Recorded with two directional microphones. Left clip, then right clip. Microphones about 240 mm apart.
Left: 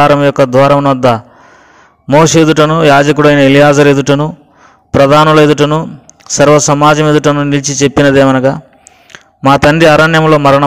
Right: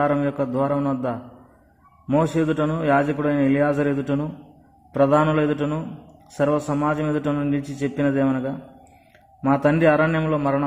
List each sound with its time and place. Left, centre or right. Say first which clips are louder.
0.0 s a man's voice: left 15 dB; left